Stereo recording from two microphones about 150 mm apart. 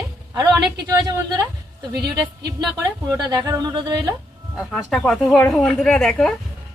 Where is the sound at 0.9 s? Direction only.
25° right (ahead or behind).